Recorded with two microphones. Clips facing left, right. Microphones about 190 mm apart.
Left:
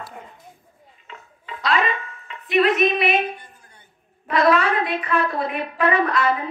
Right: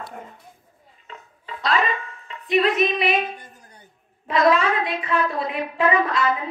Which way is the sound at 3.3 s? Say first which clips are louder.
Right 2 dB; 40° right (ahead or behind).